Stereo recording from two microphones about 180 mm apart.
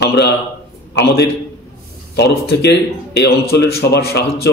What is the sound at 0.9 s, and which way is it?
A man's voice, 60° left (ahead or behind).